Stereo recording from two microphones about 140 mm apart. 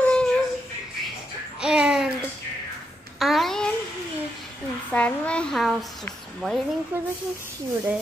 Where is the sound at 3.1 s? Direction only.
Centre (ahead or behind).